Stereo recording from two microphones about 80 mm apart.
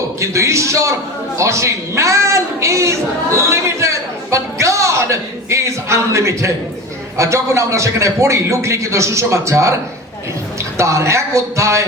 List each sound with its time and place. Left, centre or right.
0.2 s a man's voice: right
1.4 s a sound: right
7.2 s a man's voice: right
10.8 s a man's voice: right